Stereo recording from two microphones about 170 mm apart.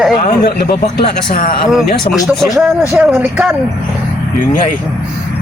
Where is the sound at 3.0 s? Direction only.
10° right (ahead or behind).